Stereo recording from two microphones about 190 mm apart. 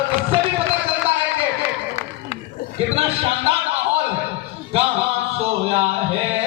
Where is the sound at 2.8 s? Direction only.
30° right (ahead or behind).